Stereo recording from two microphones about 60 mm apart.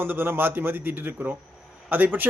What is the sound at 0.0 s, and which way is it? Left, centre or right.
A man's voice, right.